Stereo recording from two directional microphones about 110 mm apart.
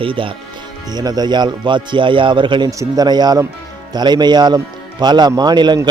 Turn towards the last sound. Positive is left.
turn(degrees=-40)  # may be behind; listen again after turning